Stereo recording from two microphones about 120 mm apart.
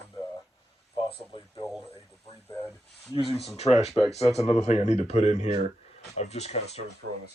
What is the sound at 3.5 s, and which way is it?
Speech, 60° left (ahead or behind).